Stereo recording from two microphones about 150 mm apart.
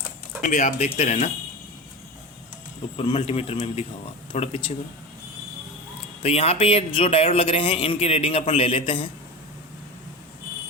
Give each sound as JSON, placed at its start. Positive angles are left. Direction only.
{"t": 0.4, "sound": "speech", "side_deg": 55}
{"t": 3.0, "sound": "speech", "side_deg": 40}
{"t": 6.2, "sound": "speech", "side_deg": 40}